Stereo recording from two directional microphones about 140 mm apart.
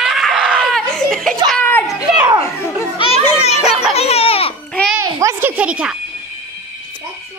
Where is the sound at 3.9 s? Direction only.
45° left (ahead or behind).